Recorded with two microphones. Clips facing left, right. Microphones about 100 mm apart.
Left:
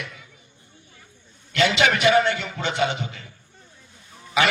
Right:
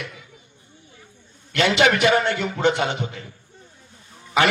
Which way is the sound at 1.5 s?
50° right (ahead or behind).